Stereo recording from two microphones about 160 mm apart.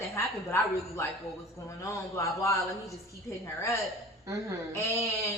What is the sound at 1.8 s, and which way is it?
A man's voice, 20° left (ahead or behind).